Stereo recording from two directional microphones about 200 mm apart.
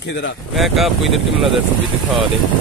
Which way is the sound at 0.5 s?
Centre (ahead or behind).